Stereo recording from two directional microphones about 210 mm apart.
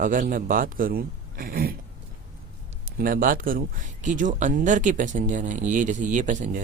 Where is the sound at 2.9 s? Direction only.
40° right (ahead or behind).